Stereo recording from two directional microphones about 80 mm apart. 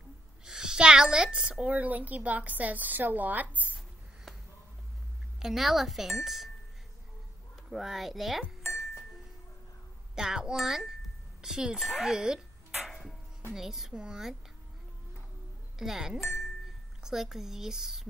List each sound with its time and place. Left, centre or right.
0.5 s a woman's voice: centre
5.4 s speech: centre
7.7 s speech: centre
10.1 s speech: centre
12.8 s a sound: centre
13.5 s speech: centre
15.8 s speech: centre